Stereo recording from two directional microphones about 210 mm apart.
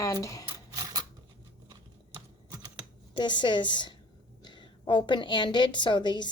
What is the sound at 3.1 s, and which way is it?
A woman's voice, 20° left (ahead or behind).